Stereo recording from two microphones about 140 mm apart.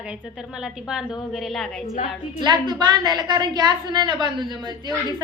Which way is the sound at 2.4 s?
30° right (ahead or behind).